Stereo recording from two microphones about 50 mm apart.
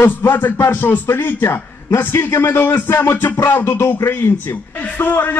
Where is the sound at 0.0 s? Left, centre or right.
Left.